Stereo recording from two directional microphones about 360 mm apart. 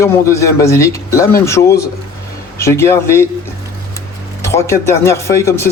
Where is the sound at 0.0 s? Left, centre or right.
Centre.